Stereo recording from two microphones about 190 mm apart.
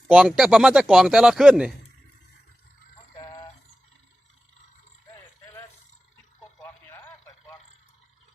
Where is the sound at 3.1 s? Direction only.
20° left (ahead or behind).